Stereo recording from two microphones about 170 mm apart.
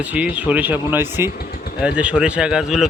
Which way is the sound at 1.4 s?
60° left (ahead or behind).